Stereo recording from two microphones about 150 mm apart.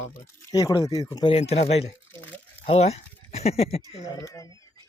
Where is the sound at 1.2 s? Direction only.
40° left (ahead or behind).